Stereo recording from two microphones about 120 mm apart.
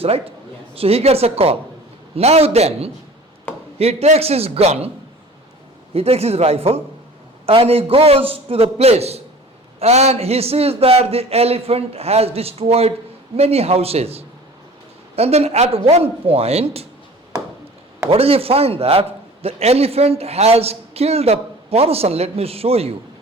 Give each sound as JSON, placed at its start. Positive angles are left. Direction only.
{"t": 0.0, "sound": "a man's voice", "side_deg": -55}
{"t": 5.9, "sound": "a man's voice", "side_deg": -55}
{"t": 18.1, "sound": "a man's voice", "side_deg": -55}